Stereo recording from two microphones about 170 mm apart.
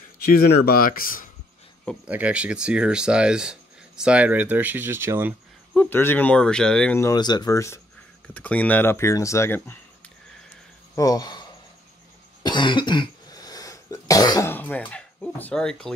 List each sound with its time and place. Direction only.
0.2 s speech: 65° left (ahead or behind)
2.0 s speech: 10° right (ahead or behind)
5.7 s speech: 10° left (ahead or behind)
7.0 s speech: 20° left (ahead or behind)
11.0 s speech: 20° left (ahead or behind)
12.4 s cough: 25° left (ahead or behind)
14.5 s speech: 10° left (ahead or behind)